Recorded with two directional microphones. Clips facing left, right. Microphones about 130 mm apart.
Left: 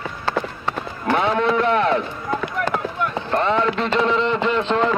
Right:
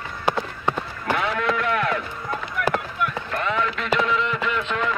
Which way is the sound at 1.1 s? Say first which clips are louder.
Left 6 dB; 25° left (ahead or behind).